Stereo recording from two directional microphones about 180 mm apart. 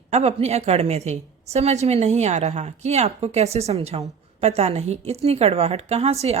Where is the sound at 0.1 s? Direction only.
35° right (ahead or behind).